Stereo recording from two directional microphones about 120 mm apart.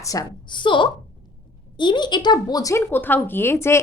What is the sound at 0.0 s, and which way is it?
A woman's voice, 30° left (ahead or behind).